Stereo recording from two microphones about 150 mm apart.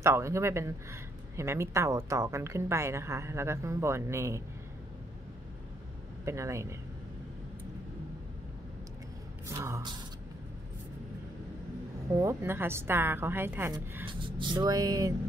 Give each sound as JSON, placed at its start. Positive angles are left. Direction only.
{"t": 0.0, "sound": "a woman's voice", "side_deg": -20}
{"t": 6.2, "sound": "a woman's voice", "side_deg": -20}
{"t": 9.5, "sound": "a woman's voice", "side_deg": -20}
{"t": 12.2, "sound": "a woman's voice", "side_deg": -20}
{"t": 14.0, "sound": "a woman's voice", "side_deg": -30}